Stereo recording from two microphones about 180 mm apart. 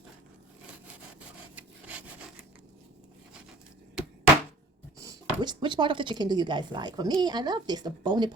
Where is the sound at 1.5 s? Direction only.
10° right (ahead or behind).